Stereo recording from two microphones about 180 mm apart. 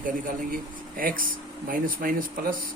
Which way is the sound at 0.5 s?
50° right (ahead or behind).